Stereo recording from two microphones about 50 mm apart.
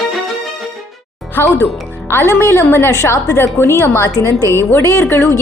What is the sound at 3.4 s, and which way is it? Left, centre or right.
Speech, left.